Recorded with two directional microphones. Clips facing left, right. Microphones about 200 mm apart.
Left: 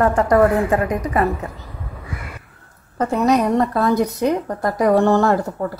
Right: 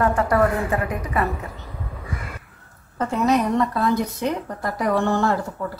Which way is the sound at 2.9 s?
40° left (ahead or behind).